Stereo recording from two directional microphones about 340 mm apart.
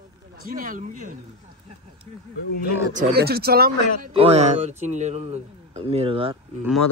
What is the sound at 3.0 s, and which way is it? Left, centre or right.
A man's voice, right.